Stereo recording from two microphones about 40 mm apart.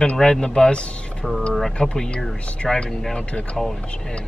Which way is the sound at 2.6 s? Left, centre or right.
Centre.